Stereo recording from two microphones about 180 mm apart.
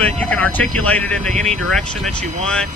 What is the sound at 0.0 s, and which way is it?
Speech, 5° left (ahead or behind).